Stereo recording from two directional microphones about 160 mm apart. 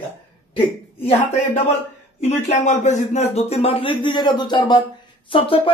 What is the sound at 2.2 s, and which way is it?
A woman's voice, 45° left (ahead or behind).